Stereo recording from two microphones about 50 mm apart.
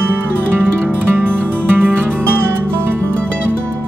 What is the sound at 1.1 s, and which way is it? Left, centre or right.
Music, right.